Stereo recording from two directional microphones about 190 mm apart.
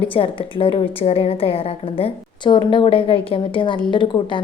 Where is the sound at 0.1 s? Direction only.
25° left (ahead or behind).